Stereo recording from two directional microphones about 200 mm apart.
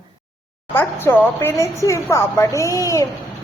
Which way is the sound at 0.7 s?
10° left (ahead or behind).